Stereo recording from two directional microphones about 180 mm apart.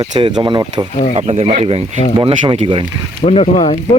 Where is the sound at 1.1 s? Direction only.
35° right (ahead or behind).